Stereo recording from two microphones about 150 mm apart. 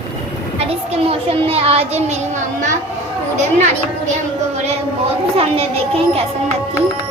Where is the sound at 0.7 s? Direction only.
40° right (ahead or behind).